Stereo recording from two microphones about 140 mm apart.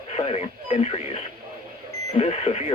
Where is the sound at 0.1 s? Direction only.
45° left (ahead or behind).